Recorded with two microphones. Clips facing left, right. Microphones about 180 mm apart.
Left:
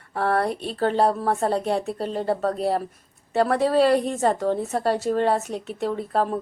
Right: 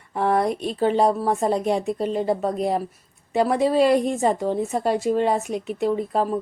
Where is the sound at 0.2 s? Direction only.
15° right (ahead or behind).